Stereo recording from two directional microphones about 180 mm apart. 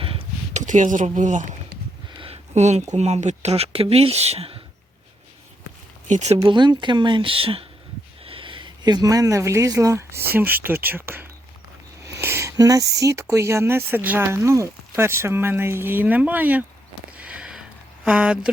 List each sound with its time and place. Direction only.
0.0 s a sound: 30° right (ahead or behind)
0.6 s speech: 45° right (ahead or behind)
2.1 s speech: 30° right (ahead or behind)
6.1 s speech: 40° right (ahead or behind)
6.4 s speech: 25° right (ahead or behind); by 16.6 s 10° right (ahead or behind)
17.2 s a sound: 5° right (ahead or behind)